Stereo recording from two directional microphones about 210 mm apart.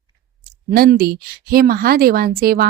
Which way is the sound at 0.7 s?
45° right (ahead or behind).